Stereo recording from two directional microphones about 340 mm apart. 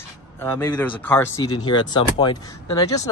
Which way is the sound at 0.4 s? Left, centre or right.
Centre.